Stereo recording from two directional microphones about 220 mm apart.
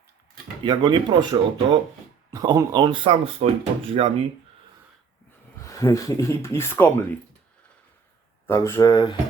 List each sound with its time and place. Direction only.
0.6 s speech: 20° right (ahead or behind)
5.5 s speech: 15° left (ahead or behind)
8.4 s speech: 10° left (ahead or behind)